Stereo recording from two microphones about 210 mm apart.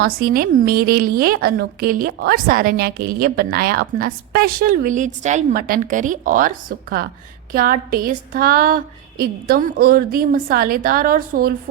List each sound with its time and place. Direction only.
0.0 s a woman's voice: 45° right (ahead or behind)